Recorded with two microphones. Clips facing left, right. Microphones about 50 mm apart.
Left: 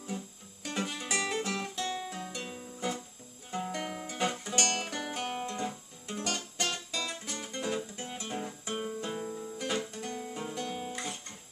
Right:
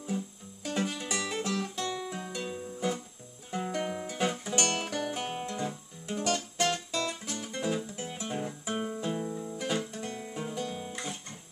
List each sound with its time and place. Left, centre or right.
0.1 s music: centre
2.0 s music: centre
5.4 s guitar: centre